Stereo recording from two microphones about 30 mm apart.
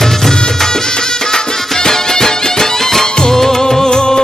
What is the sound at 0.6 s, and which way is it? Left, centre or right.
Music, left.